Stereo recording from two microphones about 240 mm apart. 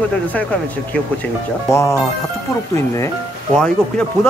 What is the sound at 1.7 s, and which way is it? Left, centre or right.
Speech, centre.